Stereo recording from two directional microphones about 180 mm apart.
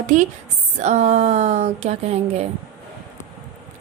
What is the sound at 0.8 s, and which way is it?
A woman's voice, 40° right (ahead or behind).